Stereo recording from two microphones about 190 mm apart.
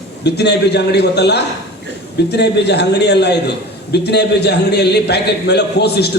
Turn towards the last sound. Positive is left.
turn(degrees=60)  # may be behind; listen again after turning